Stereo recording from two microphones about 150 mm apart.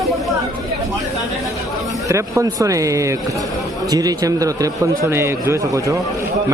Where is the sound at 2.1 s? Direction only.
25° right (ahead or behind).